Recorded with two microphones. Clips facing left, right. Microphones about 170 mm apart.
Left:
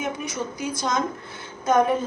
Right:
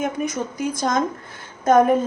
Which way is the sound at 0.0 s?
50° right (ahead or behind).